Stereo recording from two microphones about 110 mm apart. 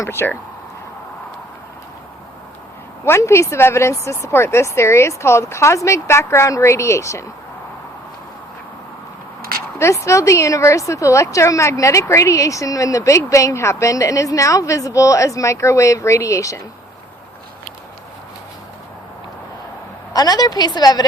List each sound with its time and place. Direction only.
0.0 s a woman's voice: 20° left (ahead or behind)
3.0 s a woman's voice: 25° left (ahead or behind)
9.7 s a woman's voice: 25° left (ahead or behind)
20.1 s a woman's voice: 35° left (ahead or behind)